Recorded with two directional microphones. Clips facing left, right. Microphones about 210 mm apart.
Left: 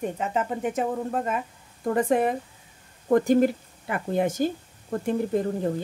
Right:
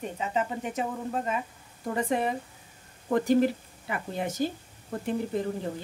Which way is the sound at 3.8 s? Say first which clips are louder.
Left 7 dB; 50° left (ahead or behind).